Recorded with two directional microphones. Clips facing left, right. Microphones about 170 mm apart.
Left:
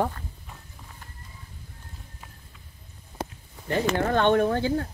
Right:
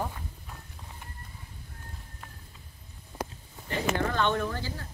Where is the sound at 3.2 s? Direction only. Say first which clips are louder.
Left 2 dB; 25° left (ahead or behind).